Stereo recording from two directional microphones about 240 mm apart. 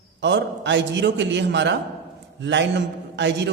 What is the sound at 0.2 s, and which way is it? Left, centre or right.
A man's voice, right.